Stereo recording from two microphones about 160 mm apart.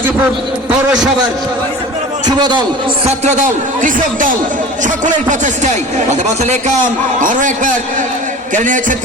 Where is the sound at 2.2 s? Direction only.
25° right (ahead or behind).